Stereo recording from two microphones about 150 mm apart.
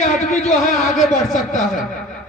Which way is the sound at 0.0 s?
50° left (ahead or behind).